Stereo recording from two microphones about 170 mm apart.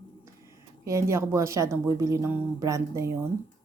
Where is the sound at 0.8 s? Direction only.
15° right (ahead or behind).